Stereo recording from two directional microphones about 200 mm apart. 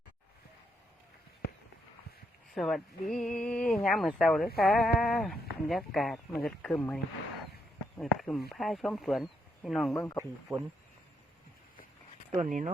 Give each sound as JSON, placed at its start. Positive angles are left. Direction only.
{"t": 2.6, "sound": "speech", "side_deg": 0}
{"t": 9.9, "sound": "speech", "side_deg": 15}
{"t": 10.5, "sound": "speech", "side_deg": -5}
{"t": 12.4, "sound": "speech", "side_deg": -40}